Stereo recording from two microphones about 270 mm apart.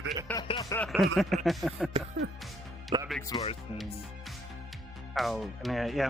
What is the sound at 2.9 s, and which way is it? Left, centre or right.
Speech, centre.